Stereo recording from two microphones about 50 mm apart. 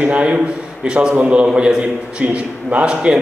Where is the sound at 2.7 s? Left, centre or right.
Centre.